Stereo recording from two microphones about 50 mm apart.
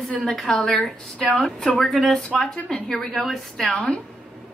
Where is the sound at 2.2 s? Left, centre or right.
Left.